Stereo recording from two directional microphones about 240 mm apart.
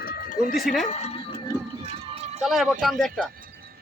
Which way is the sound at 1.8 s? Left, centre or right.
Right.